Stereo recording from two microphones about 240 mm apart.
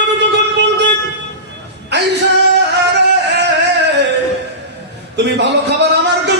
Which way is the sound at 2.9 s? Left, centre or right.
Right.